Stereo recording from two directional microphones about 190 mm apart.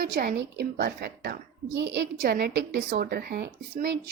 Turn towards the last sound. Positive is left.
turn(degrees=-55)  # may be behind; listen again after turning